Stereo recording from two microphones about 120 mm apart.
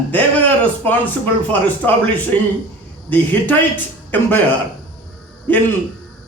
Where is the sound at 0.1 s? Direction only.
15° left (ahead or behind).